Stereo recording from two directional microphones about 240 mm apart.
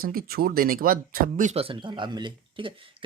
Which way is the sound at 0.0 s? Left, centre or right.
Right.